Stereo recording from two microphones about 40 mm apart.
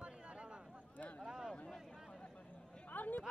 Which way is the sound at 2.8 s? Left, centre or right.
Left.